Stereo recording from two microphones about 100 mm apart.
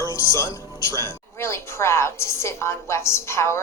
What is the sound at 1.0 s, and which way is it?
A woman's voice, 25° left (ahead or behind).